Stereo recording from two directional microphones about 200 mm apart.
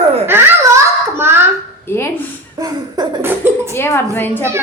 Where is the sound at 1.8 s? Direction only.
10° left (ahead or behind).